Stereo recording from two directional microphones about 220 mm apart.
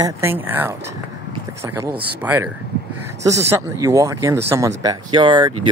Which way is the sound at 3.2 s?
15° right (ahead or behind).